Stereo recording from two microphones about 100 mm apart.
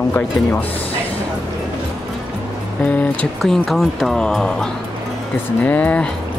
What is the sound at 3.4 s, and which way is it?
Speech, centre (ahead or behind).